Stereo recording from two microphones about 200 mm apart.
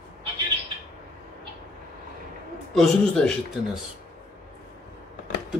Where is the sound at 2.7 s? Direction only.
5° left (ahead or behind).